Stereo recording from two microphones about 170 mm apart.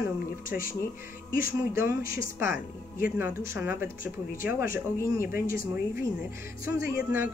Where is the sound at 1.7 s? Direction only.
15° right (ahead or behind).